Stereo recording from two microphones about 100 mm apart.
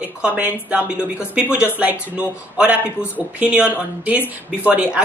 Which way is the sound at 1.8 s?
15° right (ahead or behind).